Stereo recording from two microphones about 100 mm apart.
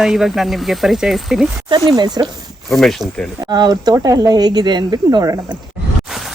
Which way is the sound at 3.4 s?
45° right (ahead or behind).